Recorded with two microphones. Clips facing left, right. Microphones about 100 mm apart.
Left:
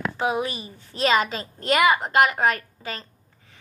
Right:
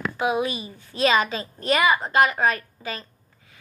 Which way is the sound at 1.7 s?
50° left (ahead or behind).